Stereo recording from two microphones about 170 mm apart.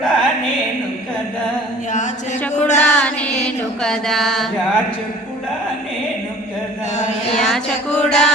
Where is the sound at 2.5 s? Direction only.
45° left (ahead or behind).